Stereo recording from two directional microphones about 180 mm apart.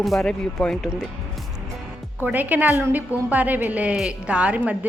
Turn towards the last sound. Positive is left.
turn(degrees=-10)  # may be behind; listen again after turning